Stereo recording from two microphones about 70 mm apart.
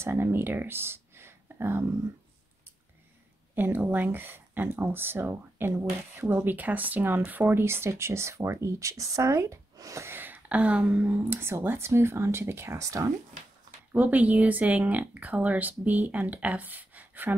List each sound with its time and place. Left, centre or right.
0.0 s speech: right
3.5 s speech: right
10.1 s speech: right
11.2 s speech: right
13.9 s a woman's voice: right